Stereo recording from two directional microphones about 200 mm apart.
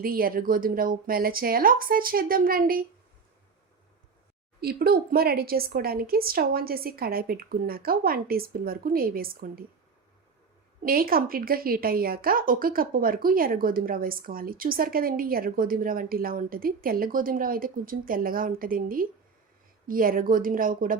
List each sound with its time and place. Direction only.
0.0 s speech: 45° right (ahead or behind)
4.6 s speech: 50° right (ahead or behind)
10.8 s speech: 45° right (ahead or behind)